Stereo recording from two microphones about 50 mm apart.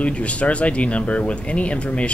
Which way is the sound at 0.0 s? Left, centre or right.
Left.